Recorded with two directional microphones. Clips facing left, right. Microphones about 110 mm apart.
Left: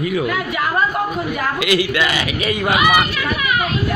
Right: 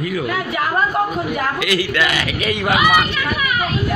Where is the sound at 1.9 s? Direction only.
5° left (ahead or behind).